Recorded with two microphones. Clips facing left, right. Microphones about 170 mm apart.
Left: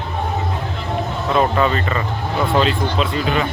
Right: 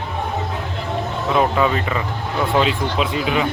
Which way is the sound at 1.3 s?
5° right (ahead or behind).